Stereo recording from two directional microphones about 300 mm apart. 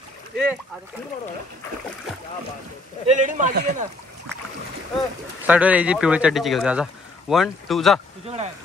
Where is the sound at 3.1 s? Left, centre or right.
Right.